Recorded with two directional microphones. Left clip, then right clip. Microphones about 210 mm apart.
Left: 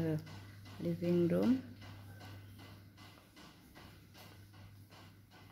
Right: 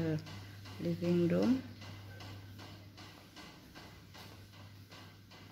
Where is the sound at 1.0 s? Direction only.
5° left (ahead or behind).